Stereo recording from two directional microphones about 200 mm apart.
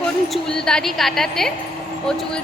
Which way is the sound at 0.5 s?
5° left (ahead or behind).